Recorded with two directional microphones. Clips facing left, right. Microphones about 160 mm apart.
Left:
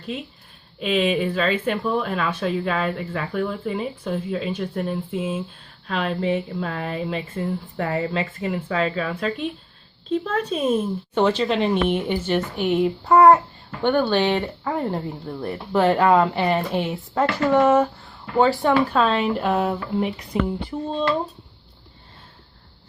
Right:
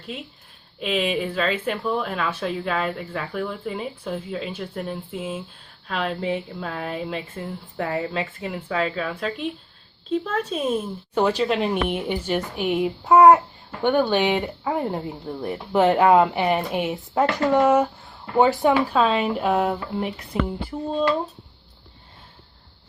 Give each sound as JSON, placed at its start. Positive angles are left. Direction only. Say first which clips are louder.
{"t": 0.8, "sound": "speech", "louder": "left 3 dB", "side_deg": 0}
{"t": 11.1, "sound": "speech", "louder": "even", "side_deg": -5}
{"t": 13.1, "sound": "a child's voice", "louder": "right 1 dB", "side_deg": -20}
{"t": 18.7, "sound": "speech", "louder": "left 1 dB", "side_deg": -5}